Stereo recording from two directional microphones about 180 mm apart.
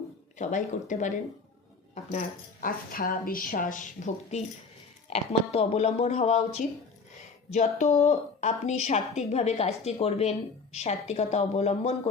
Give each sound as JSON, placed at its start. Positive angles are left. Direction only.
{"t": 0.3, "sound": "a woman's voice", "side_deg": 45}